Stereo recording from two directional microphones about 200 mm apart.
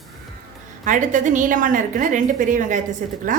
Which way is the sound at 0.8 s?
40° right (ahead or behind).